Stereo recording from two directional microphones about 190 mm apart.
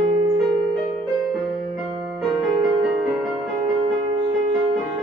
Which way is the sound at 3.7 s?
25° right (ahead or behind).